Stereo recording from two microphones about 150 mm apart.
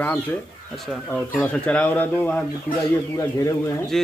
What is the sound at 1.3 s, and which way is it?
A man's voice, 10° left (ahead or behind).